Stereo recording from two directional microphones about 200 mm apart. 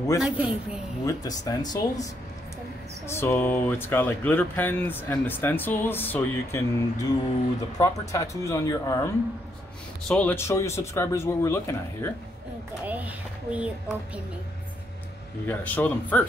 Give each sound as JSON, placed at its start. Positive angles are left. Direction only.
{"t": 0.2, "sound": "a woman's voice", "side_deg": -5}
{"t": 1.0, "sound": "speech", "side_deg": 15}
{"t": 3.1, "sound": "speech", "side_deg": 10}
{"t": 12.8, "sound": "speech", "side_deg": -10}
{"t": 15.4, "sound": "speech", "side_deg": 10}